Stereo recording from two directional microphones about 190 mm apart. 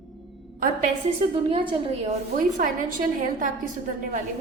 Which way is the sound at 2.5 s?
45° right (ahead or behind).